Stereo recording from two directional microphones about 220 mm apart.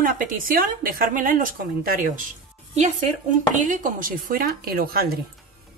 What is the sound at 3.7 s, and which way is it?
A woman's voice, 40° right (ahead or behind).